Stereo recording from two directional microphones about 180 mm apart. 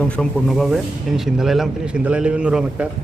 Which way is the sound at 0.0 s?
5° left (ahead or behind).